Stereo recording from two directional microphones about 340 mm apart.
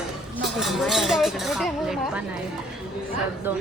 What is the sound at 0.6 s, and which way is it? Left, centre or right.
Speech, centre.